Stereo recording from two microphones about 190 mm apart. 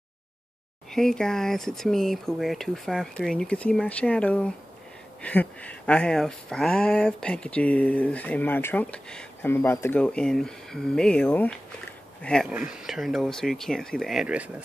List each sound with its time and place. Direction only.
0.9 s speech: 5° left (ahead or behind)